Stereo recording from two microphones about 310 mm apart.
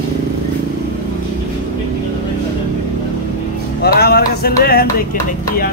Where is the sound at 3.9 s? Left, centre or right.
Left.